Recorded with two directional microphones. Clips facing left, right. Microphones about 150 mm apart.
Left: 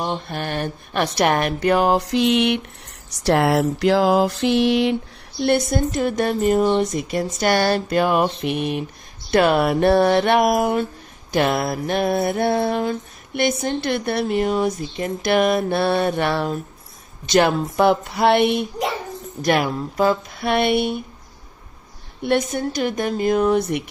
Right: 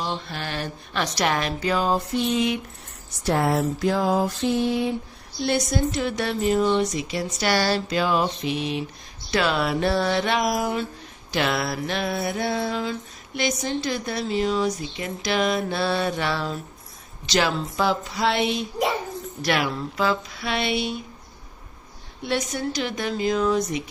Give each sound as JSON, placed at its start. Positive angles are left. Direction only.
{"t": 0.0, "sound": "mantra", "side_deg": 50}
{"t": 3.1, "sound": "a sound", "side_deg": 80}
{"t": 5.4, "sound": "speech", "side_deg": 55}
{"t": 11.3, "sound": "mantra", "side_deg": 45}
{"t": 19.4, "sound": "speech", "side_deg": 45}
{"t": 22.2, "sound": "speech", "side_deg": 55}